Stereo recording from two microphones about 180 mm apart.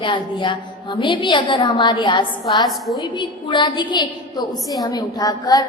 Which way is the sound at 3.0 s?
25° left (ahead or behind).